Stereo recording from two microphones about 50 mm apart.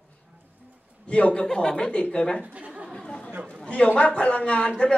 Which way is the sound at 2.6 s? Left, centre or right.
Right.